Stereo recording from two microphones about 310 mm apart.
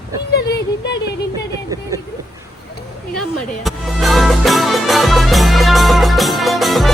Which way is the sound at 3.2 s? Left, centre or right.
Centre.